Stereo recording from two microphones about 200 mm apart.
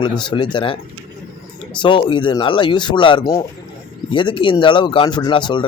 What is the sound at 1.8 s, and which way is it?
Speech, 25° left (ahead or behind).